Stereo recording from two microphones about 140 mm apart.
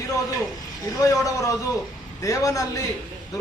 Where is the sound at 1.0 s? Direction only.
25° left (ahead or behind).